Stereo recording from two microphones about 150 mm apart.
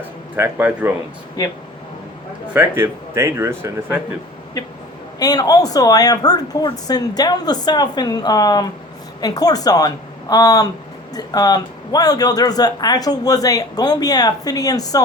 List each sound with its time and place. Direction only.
0.3 s speech: 15° right (ahead or behind)
1.4 s a man's voice: 25° left (ahead or behind)
2.5 s speech: 15° right (ahead or behind)
5.2 s a man's voice: 25° left (ahead or behind)